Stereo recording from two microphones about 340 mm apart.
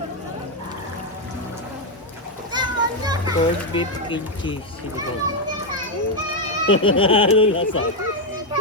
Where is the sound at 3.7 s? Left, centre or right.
Centre.